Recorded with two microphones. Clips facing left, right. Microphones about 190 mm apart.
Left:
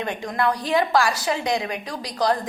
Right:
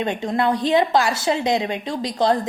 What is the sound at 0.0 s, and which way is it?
A woman's voice, 25° right (ahead or behind).